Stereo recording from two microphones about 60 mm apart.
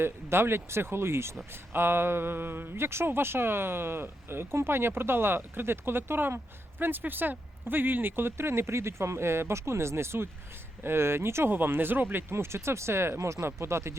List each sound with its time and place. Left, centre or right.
0.0 s speech: right
13.1 s speech: right